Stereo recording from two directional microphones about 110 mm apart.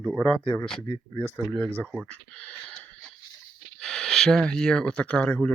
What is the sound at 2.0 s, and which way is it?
Speech, 10° left (ahead or behind).